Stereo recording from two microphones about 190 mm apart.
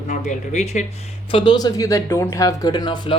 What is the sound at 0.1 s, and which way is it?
Speech, 40° left (ahead or behind).